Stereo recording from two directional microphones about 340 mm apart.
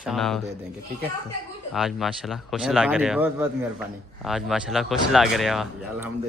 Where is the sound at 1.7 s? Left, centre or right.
Centre.